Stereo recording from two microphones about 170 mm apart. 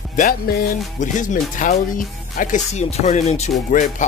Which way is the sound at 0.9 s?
45° left (ahead or behind).